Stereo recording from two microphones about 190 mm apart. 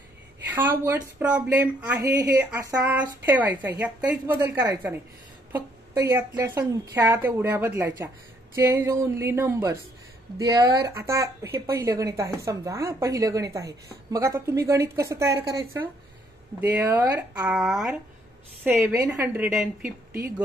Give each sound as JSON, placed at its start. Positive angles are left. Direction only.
{"t": 0.5, "sound": "a woman's voice", "side_deg": -10}